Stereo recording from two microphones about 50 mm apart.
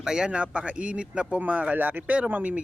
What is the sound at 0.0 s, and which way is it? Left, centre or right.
A man's voice, centre.